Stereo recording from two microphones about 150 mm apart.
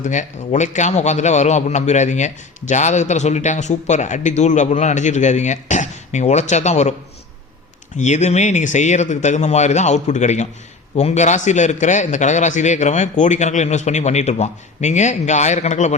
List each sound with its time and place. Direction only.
0.0 s a man's voice: 55° left (ahead or behind)
7.9 s a man's voice: 50° left (ahead or behind)